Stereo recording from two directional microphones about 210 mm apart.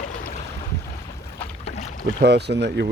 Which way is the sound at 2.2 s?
50° right (ahead or behind).